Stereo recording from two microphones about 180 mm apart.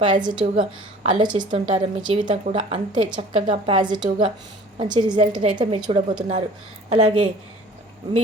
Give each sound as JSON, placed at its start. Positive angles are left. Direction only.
{"t": 0.0, "sound": "a woman's voice", "side_deg": -25}